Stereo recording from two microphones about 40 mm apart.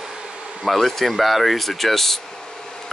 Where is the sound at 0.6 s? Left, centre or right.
Centre.